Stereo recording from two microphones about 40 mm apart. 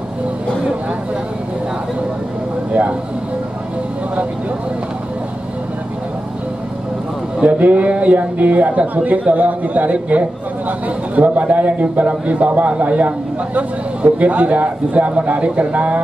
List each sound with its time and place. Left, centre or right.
2.7 s speech: right
7.4 s speech: right